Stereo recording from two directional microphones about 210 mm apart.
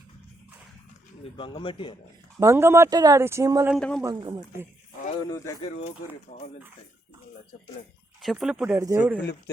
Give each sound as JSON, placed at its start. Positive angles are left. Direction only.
{"t": 1.2, "sound": "speech", "side_deg": 25}
{"t": 2.4, "sound": "speech", "side_deg": -10}
{"t": 3.8, "sound": "speech", "side_deg": 5}
{"t": 4.0, "sound": "speech", "side_deg": -15}
{"t": 5.1, "sound": "speech", "side_deg": 15}
{"t": 8.2, "sound": "speech", "side_deg": 0}